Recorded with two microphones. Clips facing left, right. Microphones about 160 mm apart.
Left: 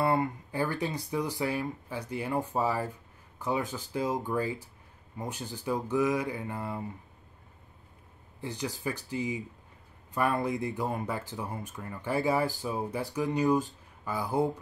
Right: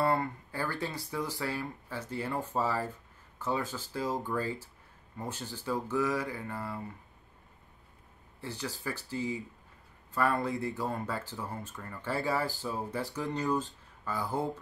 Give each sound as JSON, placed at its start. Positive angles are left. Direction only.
{"t": 0.0, "sound": "speech", "side_deg": 15}
{"t": 8.4, "sound": "speech", "side_deg": 15}